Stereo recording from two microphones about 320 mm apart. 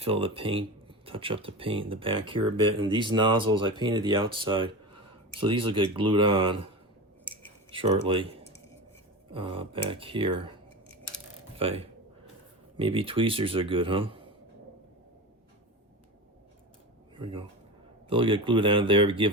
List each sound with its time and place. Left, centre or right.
0.0 s speech: centre
7.7 s speech: centre
11.5 s speech: centre
17.2 s speech: centre